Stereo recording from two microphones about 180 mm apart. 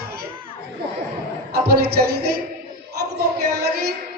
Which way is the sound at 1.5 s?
60° right (ahead or behind).